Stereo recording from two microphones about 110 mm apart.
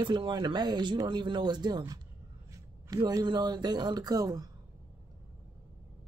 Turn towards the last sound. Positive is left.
turn(degrees=-35)  # may be behind; listen again after turning